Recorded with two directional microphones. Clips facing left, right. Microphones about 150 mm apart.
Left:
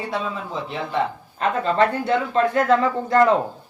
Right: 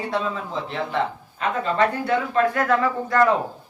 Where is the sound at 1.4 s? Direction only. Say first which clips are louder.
Left 2 dB; 35° left (ahead or behind).